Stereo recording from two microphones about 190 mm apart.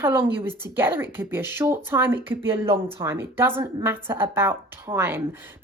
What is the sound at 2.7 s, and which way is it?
Speech, 30° right (ahead or behind).